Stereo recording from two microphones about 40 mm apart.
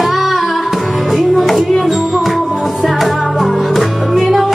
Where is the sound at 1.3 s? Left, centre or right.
Centre.